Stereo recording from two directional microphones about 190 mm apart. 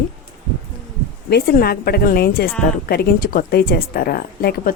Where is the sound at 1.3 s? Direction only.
55° left (ahead or behind).